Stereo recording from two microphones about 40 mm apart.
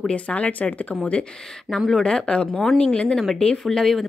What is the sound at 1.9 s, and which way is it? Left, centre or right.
Speech, centre.